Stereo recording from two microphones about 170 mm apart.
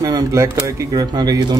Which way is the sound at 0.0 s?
20° right (ahead or behind).